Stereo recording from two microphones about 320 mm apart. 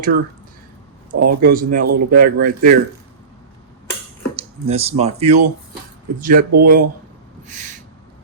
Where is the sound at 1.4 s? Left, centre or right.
Right.